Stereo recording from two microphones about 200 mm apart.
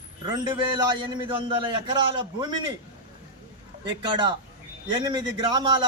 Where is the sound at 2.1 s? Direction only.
25° right (ahead or behind).